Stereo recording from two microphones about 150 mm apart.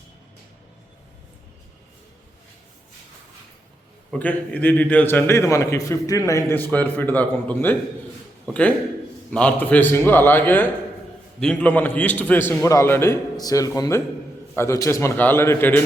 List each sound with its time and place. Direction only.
4.1 s a man's voice: 10° left (ahead or behind)
9.3 s a man's voice: 10° left (ahead or behind)